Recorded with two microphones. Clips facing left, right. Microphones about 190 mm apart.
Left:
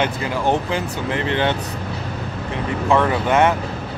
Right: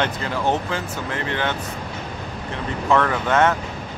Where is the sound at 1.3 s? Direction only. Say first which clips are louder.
Left 5 dB; 25° left (ahead or behind).